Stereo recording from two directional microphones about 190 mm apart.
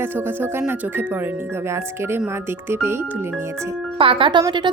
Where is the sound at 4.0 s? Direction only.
30° right (ahead or behind).